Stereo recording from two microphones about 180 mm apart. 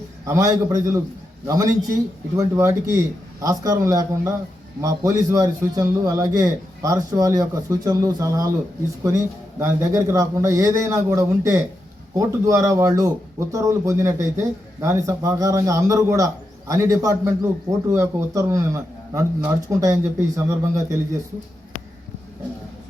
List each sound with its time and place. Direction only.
0.3 s a man's voice: 20° right (ahead or behind)